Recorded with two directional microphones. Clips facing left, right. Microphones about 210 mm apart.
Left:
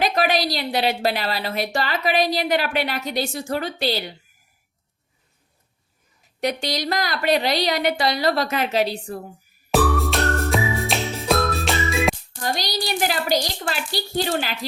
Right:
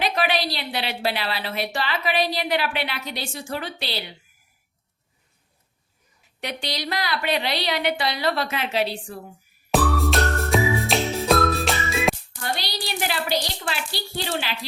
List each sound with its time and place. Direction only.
0.0 s a woman's voice: 45° left (ahead or behind)
6.4 s a woman's voice: 45° left (ahead or behind)
9.7 s music: centre (ahead or behind)
12.4 s a woman's voice: 45° left (ahead or behind)